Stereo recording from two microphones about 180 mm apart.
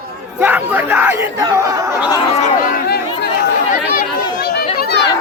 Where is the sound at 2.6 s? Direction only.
55° left (ahead or behind).